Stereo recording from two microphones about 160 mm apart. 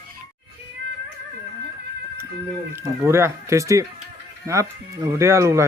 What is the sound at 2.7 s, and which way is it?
Speech, 15° right (ahead or behind).